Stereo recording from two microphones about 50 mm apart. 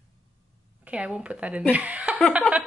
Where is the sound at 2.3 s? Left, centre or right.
Right.